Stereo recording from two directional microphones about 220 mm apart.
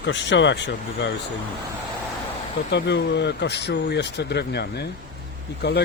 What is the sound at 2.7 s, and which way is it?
Speech, 50° left (ahead or behind).